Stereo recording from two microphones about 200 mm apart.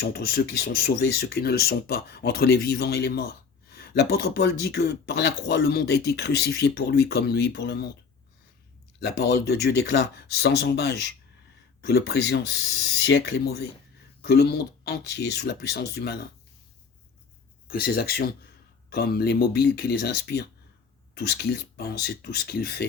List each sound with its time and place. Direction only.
0.0 s speech: 50° left (ahead or behind)
9.0 s speech: 55° left (ahead or behind)
17.7 s speech: 50° left (ahead or behind)